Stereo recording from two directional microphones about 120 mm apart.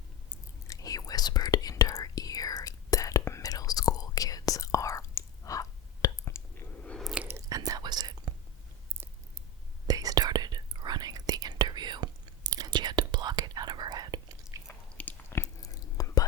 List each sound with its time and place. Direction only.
0.7 s whispering: 30° left (ahead or behind)
7.0 s chewing: 5° right (ahead or behind)
7.3 s whispering: 30° right (ahead or behind)
9.8 s whispering: 30° right (ahead or behind)
14.7 s whispering: 15° left (ahead or behind)